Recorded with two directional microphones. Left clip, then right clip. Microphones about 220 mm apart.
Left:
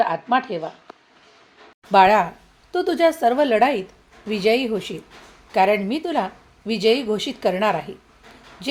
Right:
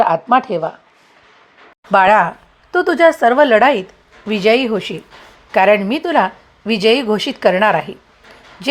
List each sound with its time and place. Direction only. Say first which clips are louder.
0.0 s speech: right 7 dB; 30° right (ahead or behind)
1.9 s speech: right 4 dB; 20° right (ahead or behind)